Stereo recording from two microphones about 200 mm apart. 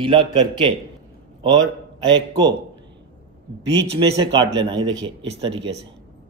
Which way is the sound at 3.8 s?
60° right (ahead or behind).